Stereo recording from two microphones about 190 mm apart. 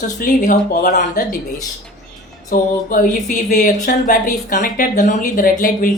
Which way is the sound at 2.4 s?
45° left (ahead or behind).